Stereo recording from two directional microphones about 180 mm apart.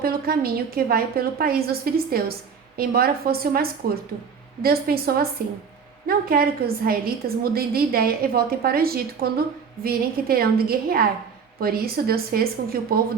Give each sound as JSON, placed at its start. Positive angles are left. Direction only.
{"t": 0.0, "sound": "a woman's voice", "side_deg": -55}